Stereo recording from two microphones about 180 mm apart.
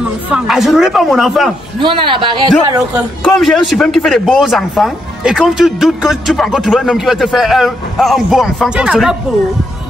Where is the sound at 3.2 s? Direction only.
Centre (ahead or behind).